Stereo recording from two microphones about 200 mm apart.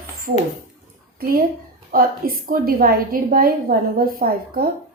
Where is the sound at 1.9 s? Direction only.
45° right (ahead or behind).